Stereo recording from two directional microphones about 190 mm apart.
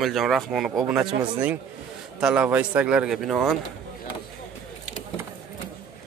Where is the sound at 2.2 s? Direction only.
5° right (ahead or behind).